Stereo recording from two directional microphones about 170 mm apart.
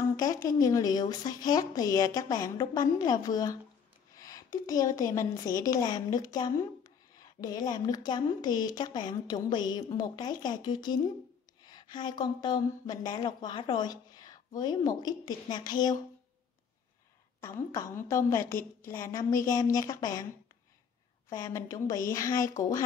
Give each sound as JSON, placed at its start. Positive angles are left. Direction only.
{"t": 0.1, "sound": "a woman's voice", "side_deg": 20}
{"t": 17.4, "sound": "a woman's voice", "side_deg": 15}
{"t": 21.3, "sound": "a woman's voice", "side_deg": 20}